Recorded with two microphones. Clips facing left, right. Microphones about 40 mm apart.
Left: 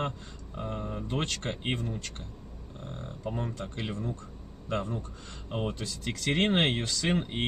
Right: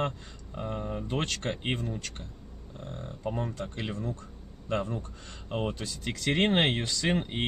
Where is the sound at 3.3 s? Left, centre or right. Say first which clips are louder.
Right 1 dB; centre.